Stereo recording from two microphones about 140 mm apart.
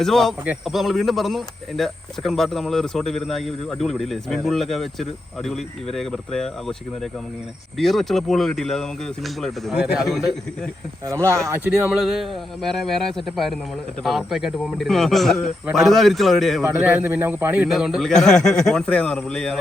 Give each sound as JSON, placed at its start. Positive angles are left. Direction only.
{"t": 0.0, "sound": "speech", "side_deg": 0}
{"t": 11.0, "sound": "speech", "side_deg": -20}
{"t": 11.9, "sound": "speech", "side_deg": 0}
{"t": 16.7, "sound": "a man's voice", "side_deg": -15}
{"t": 17.7, "sound": "speech", "side_deg": 0}